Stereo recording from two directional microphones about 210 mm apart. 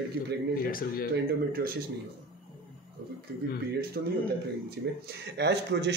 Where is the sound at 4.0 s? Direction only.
50° right (ahead or behind).